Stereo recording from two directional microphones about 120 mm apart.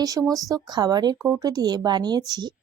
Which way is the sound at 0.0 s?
30° right (ahead or behind).